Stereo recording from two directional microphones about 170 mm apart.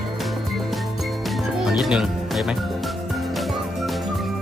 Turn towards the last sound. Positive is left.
turn(degrees=0)  # may be behind; listen again after turning